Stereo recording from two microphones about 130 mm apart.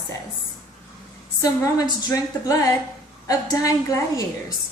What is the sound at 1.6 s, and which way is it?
A woman's voice, 25° left (ahead or behind).